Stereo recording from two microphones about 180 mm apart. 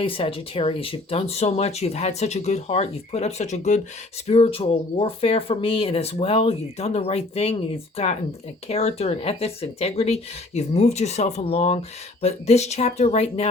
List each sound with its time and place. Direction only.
0.0 s speech: 30° left (ahead or behind)